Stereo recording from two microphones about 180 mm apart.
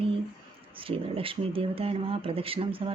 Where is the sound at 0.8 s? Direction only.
30° right (ahead or behind).